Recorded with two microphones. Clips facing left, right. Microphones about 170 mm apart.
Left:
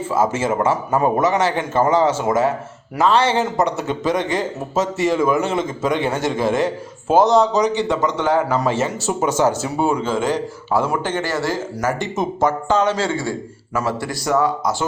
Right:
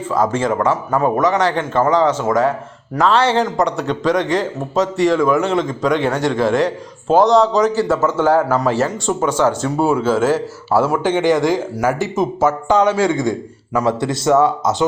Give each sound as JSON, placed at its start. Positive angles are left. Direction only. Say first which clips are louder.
{"t": 0.1, "sound": "a man's voice", "louder": "right 2 dB", "side_deg": 5}